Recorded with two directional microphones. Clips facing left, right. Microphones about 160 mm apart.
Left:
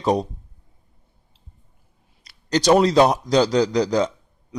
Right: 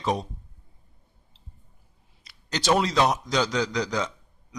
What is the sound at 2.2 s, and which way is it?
A man's voice, 40° left (ahead or behind).